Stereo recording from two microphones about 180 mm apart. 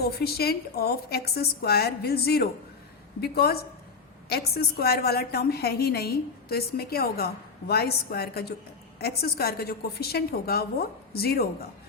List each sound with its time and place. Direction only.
0.0 s a woman's voice: 60° left (ahead or behind)